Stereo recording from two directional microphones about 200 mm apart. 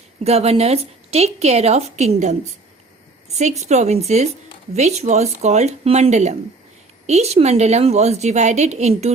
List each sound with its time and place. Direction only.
0.3 s a woman's voice: 30° right (ahead or behind)
3.6 s a woman's voice: 35° right (ahead or behind)